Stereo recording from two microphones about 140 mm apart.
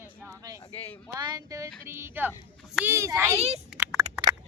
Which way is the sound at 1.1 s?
30° right (ahead or behind).